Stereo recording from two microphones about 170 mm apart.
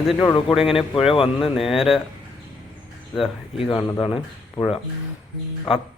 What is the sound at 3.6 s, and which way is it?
Speech, 30° left (ahead or behind).